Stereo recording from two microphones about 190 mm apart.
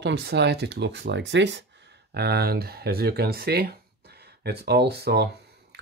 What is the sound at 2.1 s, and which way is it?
Speech, 60° right (ahead or behind).